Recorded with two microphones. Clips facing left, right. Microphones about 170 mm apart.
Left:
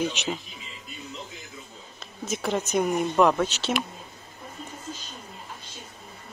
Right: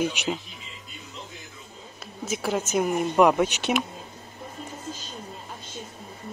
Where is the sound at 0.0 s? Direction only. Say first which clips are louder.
Right 2 dB; 10° right (ahead or behind).